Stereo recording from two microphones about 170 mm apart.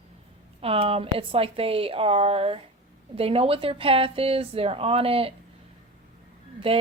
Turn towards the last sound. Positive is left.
turn(degrees=-35)  # may be behind; listen again after turning